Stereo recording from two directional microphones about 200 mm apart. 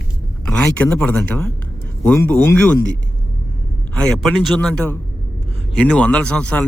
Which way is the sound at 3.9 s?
5° left (ahead or behind).